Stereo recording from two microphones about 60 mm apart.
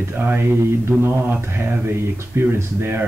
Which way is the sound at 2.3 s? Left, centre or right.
Right.